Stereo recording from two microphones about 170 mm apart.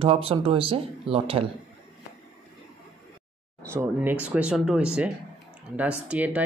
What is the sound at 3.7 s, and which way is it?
Speech, 10° right (ahead or behind).